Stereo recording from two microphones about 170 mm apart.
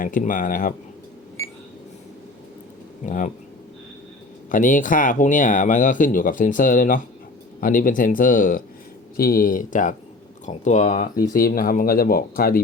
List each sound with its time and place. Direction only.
0.0 s speech: 50° left (ahead or behind)
1.4 s a sound: 15° left (ahead or behind)
3.1 s speech: 50° left (ahead or behind)
4.5 s speech: 50° left (ahead or behind)
11.3 s speech: 60° left (ahead or behind)